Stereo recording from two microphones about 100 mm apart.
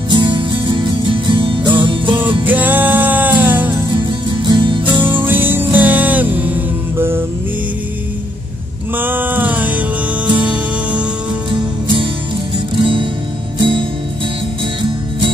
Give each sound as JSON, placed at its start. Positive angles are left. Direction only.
{"t": 0.1, "sound": "music", "side_deg": -50}
{"t": 2.4, "sound": "music", "side_deg": -15}
{"t": 4.3, "sound": "music", "side_deg": -50}
{"t": 5.2, "sound": "music", "side_deg": -20}
{"t": 8.9, "sound": "music", "side_deg": -20}
{"t": 12.7, "sound": "music", "side_deg": -60}